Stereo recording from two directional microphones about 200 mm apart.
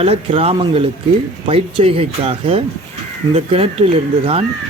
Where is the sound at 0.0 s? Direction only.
30° right (ahead or behind).